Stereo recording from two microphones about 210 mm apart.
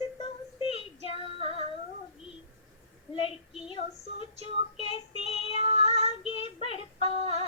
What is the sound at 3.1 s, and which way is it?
Child singing, 25° left (ahead or behind).